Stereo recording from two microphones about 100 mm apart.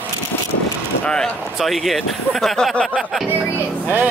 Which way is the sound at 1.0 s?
5° left (ahead or behind).